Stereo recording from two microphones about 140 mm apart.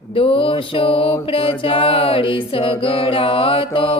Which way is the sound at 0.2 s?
40° left (ahead or behind).